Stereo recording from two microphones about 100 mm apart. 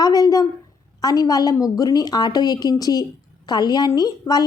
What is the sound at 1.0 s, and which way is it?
A woman's voice, 40° left (ahead or behind).